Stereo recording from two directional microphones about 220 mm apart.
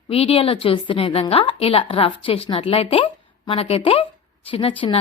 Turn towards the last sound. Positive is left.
turn(degrees=25)  # may be behind; listen again after turning